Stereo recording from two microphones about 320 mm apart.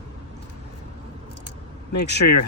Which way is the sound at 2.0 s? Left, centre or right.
Left.